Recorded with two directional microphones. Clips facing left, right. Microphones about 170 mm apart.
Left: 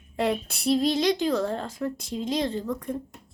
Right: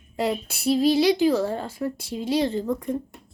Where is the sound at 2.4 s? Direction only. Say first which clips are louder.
Right 4 dB; 30° right (ahead or behind).